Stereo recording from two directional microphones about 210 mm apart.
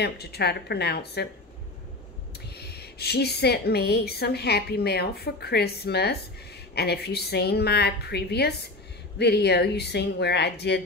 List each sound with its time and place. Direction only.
0.0 s a woman's voice: 50° left (ahead or behind)
2.5 s a woman's voice: 50° left (ahead or behind)